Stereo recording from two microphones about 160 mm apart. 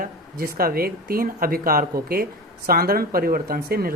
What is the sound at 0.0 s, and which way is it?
Speech, 65° right (ahead or behind).